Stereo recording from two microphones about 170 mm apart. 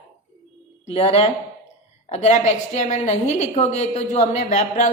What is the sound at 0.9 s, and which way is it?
A woman's voice, 40° left (ahead or behind).